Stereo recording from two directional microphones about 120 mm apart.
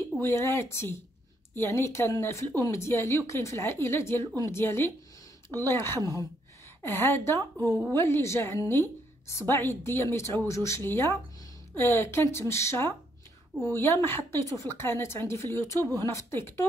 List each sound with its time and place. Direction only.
0.2 s a woman's voice: 20° left (ahead or behind)